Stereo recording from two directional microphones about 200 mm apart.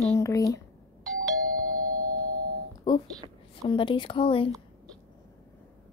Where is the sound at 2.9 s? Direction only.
20° left (ahead or behind).